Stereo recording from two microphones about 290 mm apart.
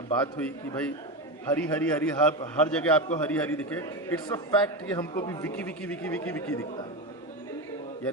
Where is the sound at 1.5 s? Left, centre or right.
Centre.